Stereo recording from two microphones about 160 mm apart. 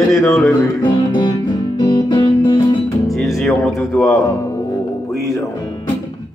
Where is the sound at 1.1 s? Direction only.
30° left (ahead or behind).